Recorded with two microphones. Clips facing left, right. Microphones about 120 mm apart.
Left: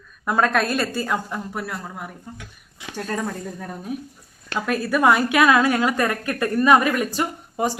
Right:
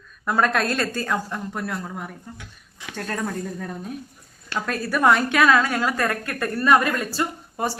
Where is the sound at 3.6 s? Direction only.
5° left (ahead or behind).